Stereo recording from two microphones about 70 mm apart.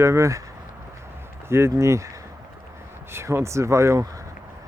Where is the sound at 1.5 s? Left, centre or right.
Right.